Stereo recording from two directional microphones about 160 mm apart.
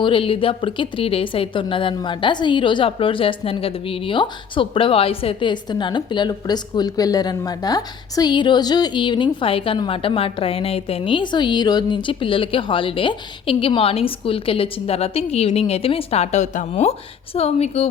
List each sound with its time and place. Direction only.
0.0 s speech: 35° left (ahead or behind)